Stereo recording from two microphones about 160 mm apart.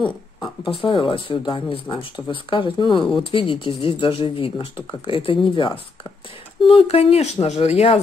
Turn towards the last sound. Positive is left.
turn(degrees=40)  # may be behind; listen again after turning